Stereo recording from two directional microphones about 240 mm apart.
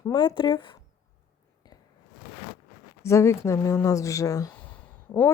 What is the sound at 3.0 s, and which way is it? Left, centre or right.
Speech, centre.